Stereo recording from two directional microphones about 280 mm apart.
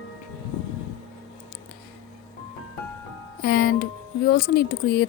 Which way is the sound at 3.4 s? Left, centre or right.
Left.